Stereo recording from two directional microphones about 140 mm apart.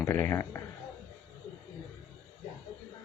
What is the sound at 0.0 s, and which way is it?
Speech, 15° left (ahead or behind).